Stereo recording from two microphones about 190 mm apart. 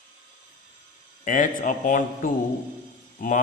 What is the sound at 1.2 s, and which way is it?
A man's voice, 45° left (ahead or behind).